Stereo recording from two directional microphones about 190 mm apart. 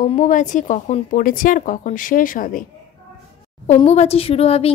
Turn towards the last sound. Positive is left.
turn(degrees=30)  # may be behind; listen again after turning